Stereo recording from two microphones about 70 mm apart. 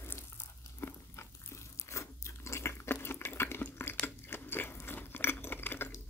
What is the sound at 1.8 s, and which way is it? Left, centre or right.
Water, left.